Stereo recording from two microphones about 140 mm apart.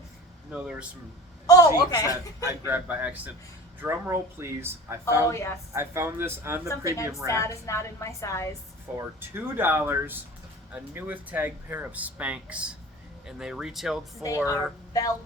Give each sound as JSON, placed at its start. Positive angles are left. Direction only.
{"t": 0.5, "sound": "speech", "side_deg": -10}
{"t": 1.5, "sound": "a woman's voice", "side_deg": 25}
{"t": 2.4, "sound": "speech", "side_deg": -20}
{"t": 5.3, "sound": "a woman's voice", "side_deg": 20}
{"t": 5.7, "sound": "speech", "side_deg": -20}
{"t": 6.7, "sound": "a woman's voice", "side_deg": 20}
{"t": 9.0, "sound": "speech", "side_deg": -15}
{"t": 14.4, "sound": "a woman's voice", "side_deg": 25}